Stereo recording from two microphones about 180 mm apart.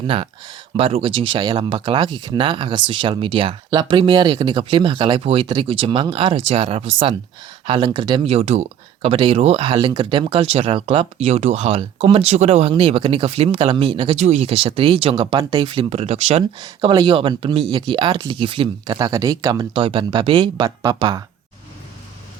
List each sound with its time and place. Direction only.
0.1 s speech: 30° right (ahead or behind)
16.6 s speech: 25° right (ahead or behind)